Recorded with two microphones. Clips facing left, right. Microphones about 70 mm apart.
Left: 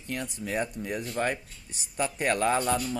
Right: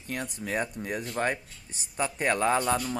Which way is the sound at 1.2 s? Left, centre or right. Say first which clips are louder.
Right 1 dB; right.